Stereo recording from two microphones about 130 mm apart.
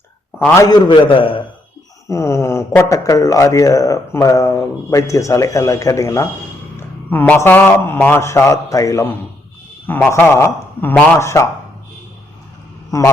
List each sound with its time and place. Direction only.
0.6 s a man's voice: 35° left (ahead or behind)
2.0 s speech: 20° left (ahead or behind)
9.8 s speech: 15° left (ahead or behind)
12.9 s speech: 25° left (ahead or behind)